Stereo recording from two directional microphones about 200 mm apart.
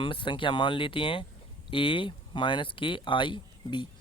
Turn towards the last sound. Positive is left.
turn(degrees=25)  # may be behind; listen again after turning